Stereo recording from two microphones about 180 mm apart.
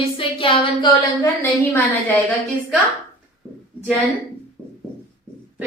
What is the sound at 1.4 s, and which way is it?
Speech, 10° left (ahead or behind).